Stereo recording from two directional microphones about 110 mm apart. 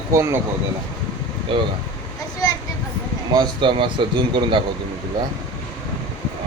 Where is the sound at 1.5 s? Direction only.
50° right (ahead or behind).